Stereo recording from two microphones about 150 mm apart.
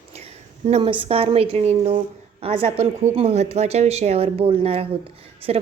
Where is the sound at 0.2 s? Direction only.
40° right (ahead or behind).